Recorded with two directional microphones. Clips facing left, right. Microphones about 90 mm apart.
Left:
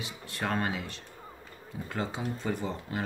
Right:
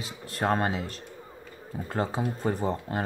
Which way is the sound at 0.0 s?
35° right (ahead or behind).